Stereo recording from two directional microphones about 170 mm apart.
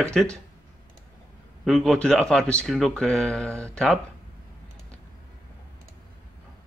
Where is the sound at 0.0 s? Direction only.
5° left (ahead or behind).